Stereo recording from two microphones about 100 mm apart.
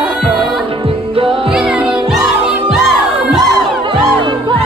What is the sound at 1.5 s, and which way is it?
Music, 5° right (ahead or behind).